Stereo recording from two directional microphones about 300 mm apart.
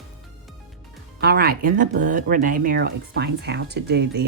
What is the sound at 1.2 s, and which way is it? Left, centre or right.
Speech, right.